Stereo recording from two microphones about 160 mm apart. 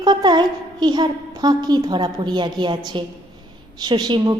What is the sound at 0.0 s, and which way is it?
A woman's voice, 25° right (ahead or behind).